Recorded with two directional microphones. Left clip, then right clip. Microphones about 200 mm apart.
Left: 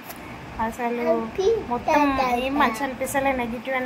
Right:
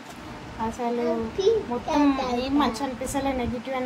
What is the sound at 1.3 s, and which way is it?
Speech, 20° left (ahead or behind).